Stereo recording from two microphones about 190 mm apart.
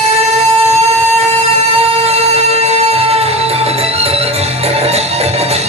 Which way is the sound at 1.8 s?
30° right (ahead or behind).